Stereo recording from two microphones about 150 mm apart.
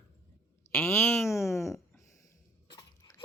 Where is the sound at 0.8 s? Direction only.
15° left (ahead or behind).